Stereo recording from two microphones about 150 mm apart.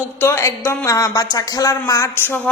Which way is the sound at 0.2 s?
15° left (ahead or behind).